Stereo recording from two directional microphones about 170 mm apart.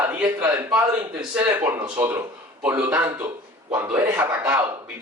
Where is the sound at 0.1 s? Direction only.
10° right (ahead or behind).